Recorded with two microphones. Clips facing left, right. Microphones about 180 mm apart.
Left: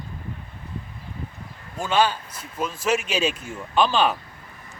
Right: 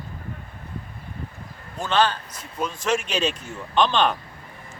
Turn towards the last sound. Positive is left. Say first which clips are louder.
# even
turn(degrees=5)  # may be behind; listen again after turning